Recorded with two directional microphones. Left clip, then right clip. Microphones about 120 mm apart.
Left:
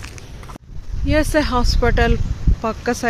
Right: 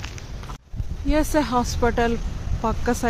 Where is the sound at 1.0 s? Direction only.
Centre (ahead or behind).